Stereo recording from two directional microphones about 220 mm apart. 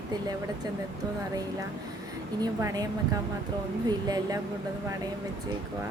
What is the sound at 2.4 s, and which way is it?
Speech, 15° right (ahead or behind).